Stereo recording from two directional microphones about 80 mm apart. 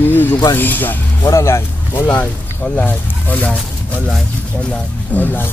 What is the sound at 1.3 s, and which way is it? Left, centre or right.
Speech, left.